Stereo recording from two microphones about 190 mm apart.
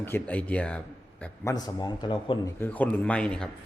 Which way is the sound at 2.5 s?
10° left (ahead or behind).